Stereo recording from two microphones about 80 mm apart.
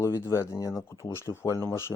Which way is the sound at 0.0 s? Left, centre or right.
Left.